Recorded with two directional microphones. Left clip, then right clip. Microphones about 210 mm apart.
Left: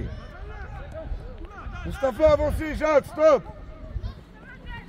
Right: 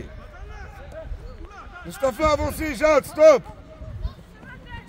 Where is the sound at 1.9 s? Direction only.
60° right (ahead or behind).